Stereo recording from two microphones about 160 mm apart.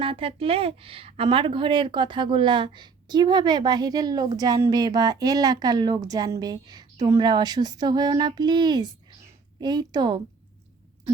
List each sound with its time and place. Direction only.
0.0 s a woman's voice: 35° right (ahead or behind)